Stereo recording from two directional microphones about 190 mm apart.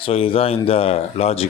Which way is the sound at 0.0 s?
30° left (ahead or behind).